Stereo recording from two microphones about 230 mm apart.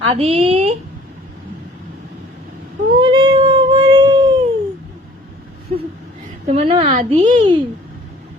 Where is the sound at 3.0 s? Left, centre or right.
Right.